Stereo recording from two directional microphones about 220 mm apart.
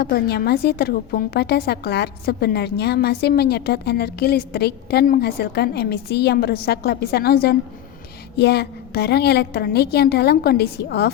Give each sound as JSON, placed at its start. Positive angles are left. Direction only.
{"t": 0.0, "sound": "a woman's voice", "side_deg": 45}